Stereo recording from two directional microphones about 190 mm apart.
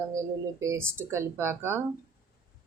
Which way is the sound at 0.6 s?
15° right (ahead or behind).